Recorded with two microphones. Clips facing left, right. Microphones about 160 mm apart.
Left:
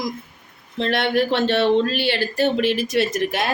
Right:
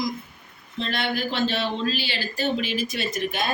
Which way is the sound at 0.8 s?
70° left (ahead or behind).